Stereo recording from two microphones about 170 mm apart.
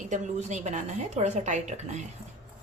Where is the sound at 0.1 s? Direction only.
45° right (ahead or behind).